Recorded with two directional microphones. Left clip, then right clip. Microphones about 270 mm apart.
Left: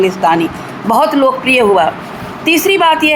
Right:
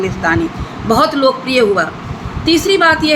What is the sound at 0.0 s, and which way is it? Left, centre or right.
Speech, centre.